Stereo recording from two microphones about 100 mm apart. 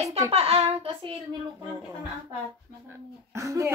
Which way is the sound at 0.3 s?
80° right.